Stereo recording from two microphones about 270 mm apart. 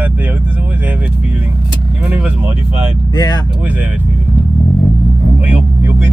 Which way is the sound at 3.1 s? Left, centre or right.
Centre.